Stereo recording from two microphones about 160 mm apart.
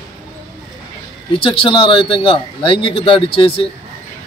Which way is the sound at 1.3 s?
35° left (ahead or behind).